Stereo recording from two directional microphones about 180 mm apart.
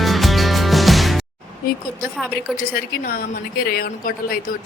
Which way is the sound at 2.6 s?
55° left (ahead or behind).